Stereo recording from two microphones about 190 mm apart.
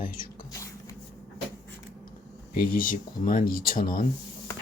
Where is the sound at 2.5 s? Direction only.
50° left (ahead or behind).